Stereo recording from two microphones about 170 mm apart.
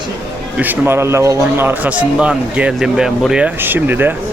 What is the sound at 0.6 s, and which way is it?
Speech, 10° right (ahead or behind).